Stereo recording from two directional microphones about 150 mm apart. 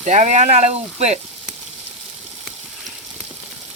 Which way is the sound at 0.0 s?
55° right (ahead or behind).